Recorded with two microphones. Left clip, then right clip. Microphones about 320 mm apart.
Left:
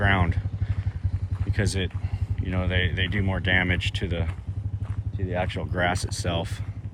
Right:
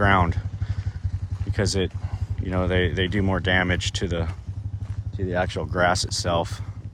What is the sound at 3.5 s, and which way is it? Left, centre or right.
Speech, right.